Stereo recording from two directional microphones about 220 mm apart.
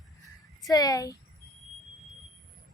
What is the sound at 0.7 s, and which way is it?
Female singing, 15° left (ahead or behind).